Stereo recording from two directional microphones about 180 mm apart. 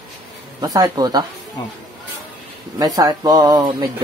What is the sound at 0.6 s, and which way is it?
Speech, 20° right (ahead or behind).